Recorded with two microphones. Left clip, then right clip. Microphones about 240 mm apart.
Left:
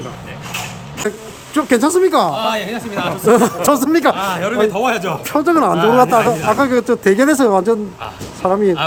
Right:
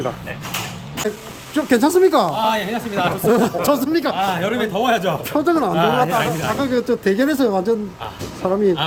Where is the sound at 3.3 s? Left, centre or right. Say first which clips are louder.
Left 6 dB; centre.